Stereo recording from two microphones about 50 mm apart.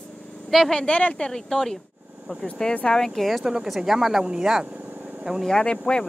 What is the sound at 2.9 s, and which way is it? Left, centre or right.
Speech, centre.